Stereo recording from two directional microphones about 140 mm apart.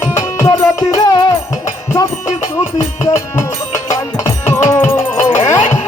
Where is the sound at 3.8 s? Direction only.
20° left (ahead or behind).